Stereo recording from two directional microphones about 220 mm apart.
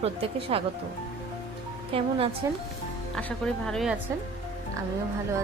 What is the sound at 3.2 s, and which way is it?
Speech, 5° left (ahead or behind).